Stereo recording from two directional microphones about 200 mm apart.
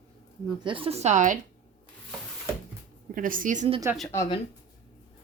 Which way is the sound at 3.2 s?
40° right (ahead or behind).